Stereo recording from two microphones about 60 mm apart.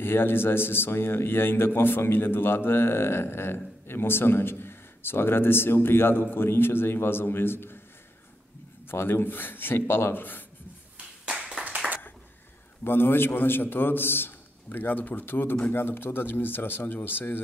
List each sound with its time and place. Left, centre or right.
0.0 s a man's voice: left
8.8 s a man's voice: left
11.2 s clapping: centre
12.8 s a man's voice: left